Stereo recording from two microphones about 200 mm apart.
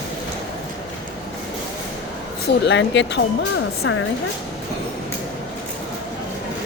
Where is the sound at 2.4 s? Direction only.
60° left (ahead or behind).